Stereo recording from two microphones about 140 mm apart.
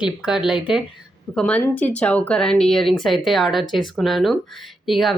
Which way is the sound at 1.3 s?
10° left (ahead or behind).